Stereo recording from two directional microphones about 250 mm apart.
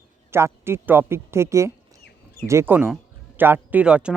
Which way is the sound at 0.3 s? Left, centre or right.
Centre.